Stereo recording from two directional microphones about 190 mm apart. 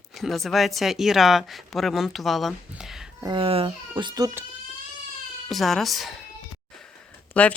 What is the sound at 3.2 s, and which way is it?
A child's voice, 25° right (ahead or behind).